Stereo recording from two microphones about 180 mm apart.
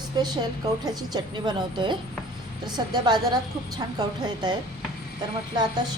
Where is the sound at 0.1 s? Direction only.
25° right (ahead or behind).